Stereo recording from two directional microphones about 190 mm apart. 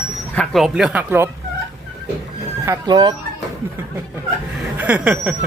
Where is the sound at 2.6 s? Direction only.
20° right (ahead or behind).